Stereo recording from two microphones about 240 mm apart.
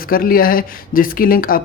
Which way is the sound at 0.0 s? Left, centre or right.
Left.